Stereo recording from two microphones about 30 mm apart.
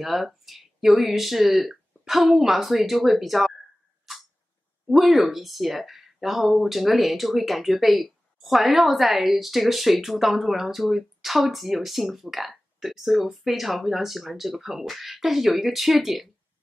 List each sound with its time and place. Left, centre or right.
0.0 s speech: centre
4.9 s speech: centre